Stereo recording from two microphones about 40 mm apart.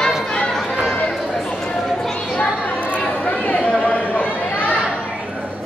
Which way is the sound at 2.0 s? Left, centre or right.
Centre.